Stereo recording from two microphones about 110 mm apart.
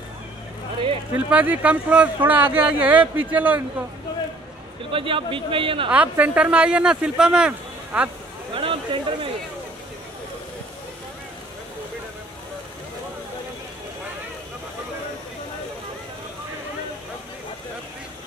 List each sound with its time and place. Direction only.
1.1 s speech: 15° right (ahead or behind)
4.9 s a man's voice: 55° right (ahead or behind)
5.9 s speech: 15° right (ahead or behind)
8.5 s speech: 55° right (ahead or behind)